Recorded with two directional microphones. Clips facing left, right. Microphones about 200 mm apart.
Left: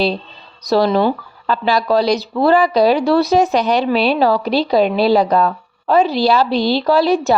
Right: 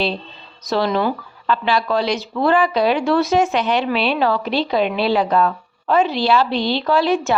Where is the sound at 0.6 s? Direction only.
35° left (ahead or behind).